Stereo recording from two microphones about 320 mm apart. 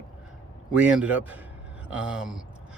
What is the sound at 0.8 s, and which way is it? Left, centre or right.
Speech, centre.